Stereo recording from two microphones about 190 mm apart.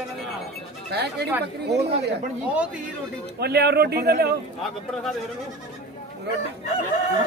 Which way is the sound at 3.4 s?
60° right (ahead or behind).